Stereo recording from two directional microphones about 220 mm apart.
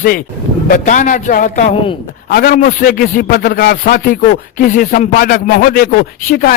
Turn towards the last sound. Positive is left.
turn(degrees=40)  # may be behind; listen again after turning